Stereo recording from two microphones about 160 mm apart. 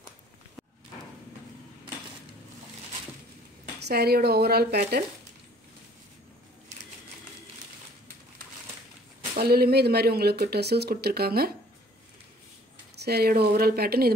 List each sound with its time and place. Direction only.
3.8 s speech: 85° right
9.3 s speech: 75° right (ahead or behind)
12.9 s speech: 85° right